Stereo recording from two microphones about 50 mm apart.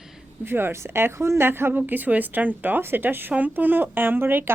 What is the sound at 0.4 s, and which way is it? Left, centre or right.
A woman's voice, right.